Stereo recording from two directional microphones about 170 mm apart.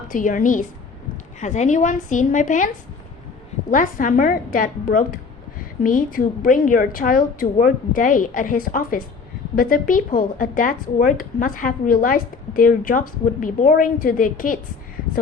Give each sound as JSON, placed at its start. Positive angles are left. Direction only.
{"t": 0.1, "sound": "a woman's voice", "side_deg": 50}
{"t": 3.7, "sound": "a woman's voice", "side_deg": 50}